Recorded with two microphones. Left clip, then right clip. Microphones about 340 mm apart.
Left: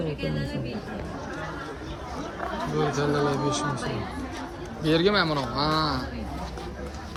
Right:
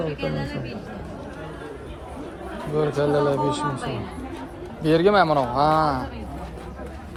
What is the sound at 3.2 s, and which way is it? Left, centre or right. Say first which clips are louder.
Speech: right 4 dB; centre.